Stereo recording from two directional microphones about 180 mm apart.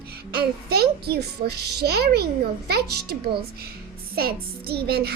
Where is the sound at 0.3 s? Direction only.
60° right (ahead or behind).